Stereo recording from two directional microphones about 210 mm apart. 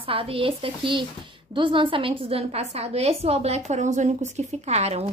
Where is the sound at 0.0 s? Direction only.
25° right (ahead or behind).